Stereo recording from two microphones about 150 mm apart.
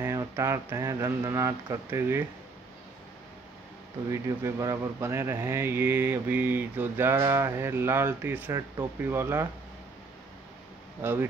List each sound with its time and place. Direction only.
0.0 s speech: 20° right (ahead or behind)
4.1 s speech: 20° right (ahead or behind)
11.0 s speech: 15° right (ahead or behind)